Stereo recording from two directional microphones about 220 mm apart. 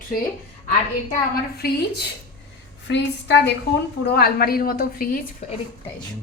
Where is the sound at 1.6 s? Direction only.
45° left (ahead or behind).